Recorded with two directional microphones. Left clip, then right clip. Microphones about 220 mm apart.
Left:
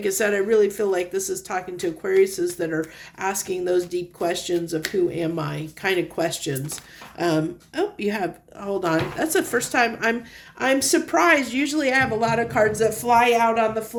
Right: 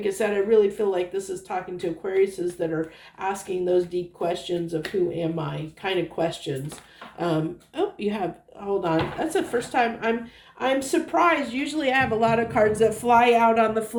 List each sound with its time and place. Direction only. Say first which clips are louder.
0.0 s speech: left 2 dB; 40° left (ahead or behind); by 13.8 s 15° left (ahead or behind)